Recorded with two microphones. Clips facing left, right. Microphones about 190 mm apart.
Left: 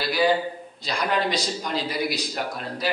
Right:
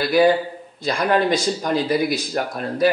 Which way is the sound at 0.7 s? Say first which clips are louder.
Right 7 dB; 50° right (ahead or behind).